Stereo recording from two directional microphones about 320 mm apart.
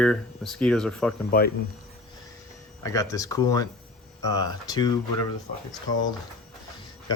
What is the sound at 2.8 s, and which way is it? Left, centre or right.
Speech, centre.